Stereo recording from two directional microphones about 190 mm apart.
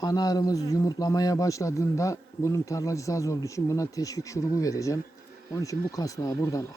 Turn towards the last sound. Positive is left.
turn(degrees=15)  # may be behind; listen again after turning